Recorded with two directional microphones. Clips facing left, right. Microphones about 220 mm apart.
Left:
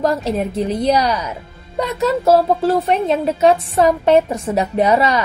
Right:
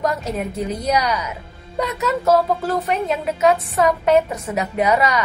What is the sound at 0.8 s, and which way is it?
A woman's voice, 30° left (ahead or behind).